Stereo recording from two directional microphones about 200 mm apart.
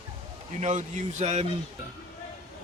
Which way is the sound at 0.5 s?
35° right (ahead or behind).